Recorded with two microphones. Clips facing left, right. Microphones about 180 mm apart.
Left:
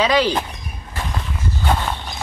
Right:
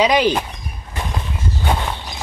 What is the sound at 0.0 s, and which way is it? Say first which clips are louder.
Speech: right 2 dB; 15° right (ahead or behind).